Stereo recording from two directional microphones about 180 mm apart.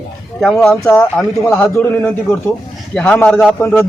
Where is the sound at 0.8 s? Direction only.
15° left (ahead or behind).